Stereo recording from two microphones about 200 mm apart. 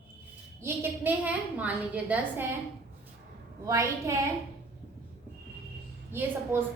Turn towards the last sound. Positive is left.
turn(degrees=-10)  # may be behind; listen again after turning